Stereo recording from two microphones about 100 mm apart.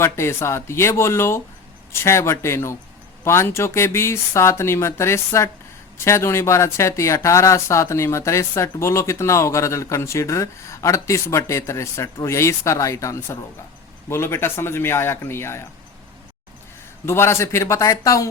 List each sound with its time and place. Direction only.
0.0 s speech: 25° left (ahead or behind)
17.1 s speech: 25° left (ahead or behind)